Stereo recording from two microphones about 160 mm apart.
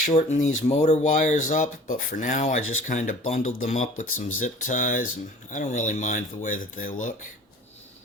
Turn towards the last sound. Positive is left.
turn(degrees=55)  # may be behind; listen again after turning